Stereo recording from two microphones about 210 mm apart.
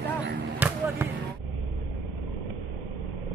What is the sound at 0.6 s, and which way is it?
Basketball bounce, 10° right (ahead or behind).